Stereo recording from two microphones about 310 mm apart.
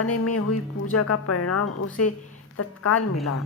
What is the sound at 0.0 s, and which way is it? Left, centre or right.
A woman's voice, left.